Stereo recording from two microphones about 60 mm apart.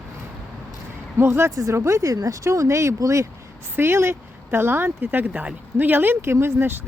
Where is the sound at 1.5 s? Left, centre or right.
Right.